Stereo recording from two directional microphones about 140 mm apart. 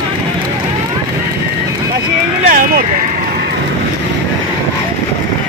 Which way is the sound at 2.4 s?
85° right.